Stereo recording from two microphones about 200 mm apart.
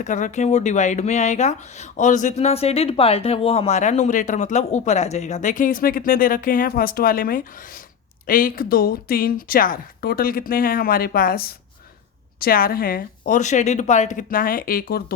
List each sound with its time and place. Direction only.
0.0 s speech: 35° left (ahead or behind)